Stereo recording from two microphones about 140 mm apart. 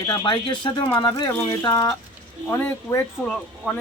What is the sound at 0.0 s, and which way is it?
Speech, 25° left (ahead or behind).